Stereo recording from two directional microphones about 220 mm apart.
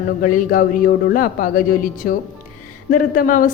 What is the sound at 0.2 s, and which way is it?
Speech, 40° left (ahead or behind).